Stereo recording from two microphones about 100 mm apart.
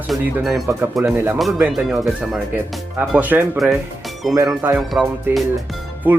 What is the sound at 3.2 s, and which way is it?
Speech, 20° right (ahead or behind).